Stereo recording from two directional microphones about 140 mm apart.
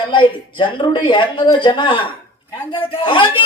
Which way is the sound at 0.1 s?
35° left (ahead or behind).